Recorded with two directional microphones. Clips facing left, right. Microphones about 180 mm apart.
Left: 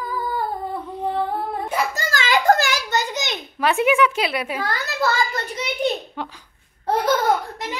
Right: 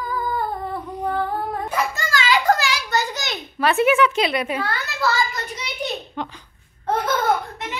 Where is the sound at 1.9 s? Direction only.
45° left (ahead or behind).